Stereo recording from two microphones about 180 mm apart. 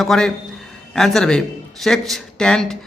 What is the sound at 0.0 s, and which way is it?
A man's voice, centre (ahead or behind).